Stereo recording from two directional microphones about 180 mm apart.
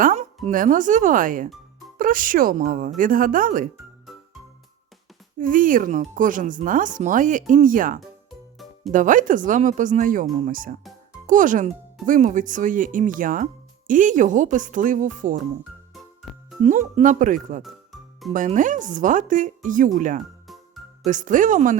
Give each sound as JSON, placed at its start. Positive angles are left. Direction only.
{"t": 0.0, "sound": "music", "side_deg": -45}
{"t": 0.4, "sound": "speech", "side_deg": -50}
{"t": 5.4, "sound": "speech", "side_deg": -50}
{"t": 8.3, "sound": "music", "side_deg": 0}
{"t": 8.9, "sound": "speech", "side_deg": -45}
{"t": 16.6, "sound": "speech", "side_deg": -40}